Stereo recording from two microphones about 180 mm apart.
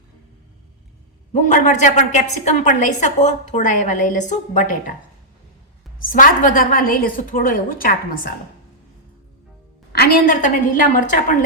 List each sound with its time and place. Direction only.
1.3 s a woman's voice: 40° left (ahead or behind)
6.1 s a woman's voice: 50° left (ahead or behind)
10.0 s a woman's voice: 55° left (ahead or behind)